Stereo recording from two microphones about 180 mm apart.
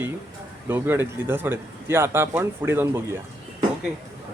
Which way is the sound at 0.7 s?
10° right (ahead or behind).